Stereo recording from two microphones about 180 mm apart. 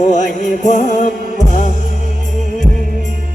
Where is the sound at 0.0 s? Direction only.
45° left (ahead or behind).